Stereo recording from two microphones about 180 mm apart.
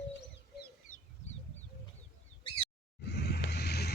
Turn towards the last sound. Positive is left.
turn(degrees=65)  # may be behind; listen again after turning